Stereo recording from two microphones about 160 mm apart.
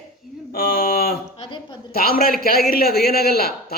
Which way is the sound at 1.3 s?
30° left (ahead or behind).